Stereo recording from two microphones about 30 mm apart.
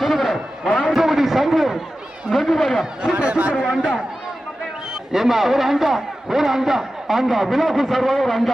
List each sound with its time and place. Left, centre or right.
0.0 s a sound: centre
0.8 s a man's voice: centre
3.2 s a man's voice: right
5.1 s a man's voice: centre